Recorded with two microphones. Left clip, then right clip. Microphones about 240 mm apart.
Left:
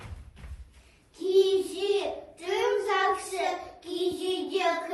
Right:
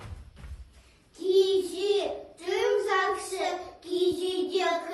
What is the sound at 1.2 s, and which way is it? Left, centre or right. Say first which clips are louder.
A child's voice: even; centre.